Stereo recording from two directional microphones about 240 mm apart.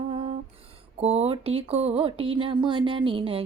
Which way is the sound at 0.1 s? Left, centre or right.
Right.